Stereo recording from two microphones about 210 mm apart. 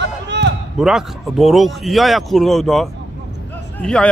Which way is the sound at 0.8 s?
Centre (ahead or behind).